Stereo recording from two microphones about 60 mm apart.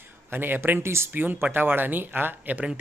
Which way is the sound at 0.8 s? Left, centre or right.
Right.